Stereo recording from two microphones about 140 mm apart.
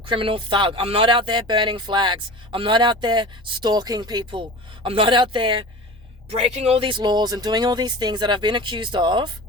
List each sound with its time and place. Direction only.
0.1 s speech: 40° right (ahead or behind)